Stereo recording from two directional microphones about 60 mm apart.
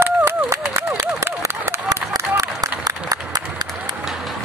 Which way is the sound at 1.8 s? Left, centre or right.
Right.